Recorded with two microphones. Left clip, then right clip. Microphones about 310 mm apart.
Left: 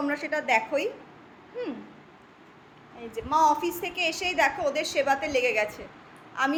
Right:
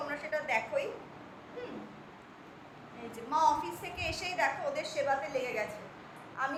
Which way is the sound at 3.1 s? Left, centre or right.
Left.